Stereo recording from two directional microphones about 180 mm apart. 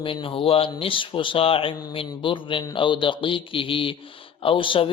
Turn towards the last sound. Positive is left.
turn(degrees=30)  # may be behind; listen again after turning